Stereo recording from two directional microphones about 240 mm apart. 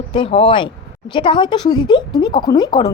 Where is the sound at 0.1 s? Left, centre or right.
Left.